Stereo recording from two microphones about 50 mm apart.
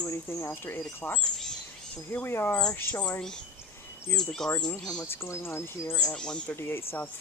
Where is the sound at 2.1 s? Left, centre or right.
Left.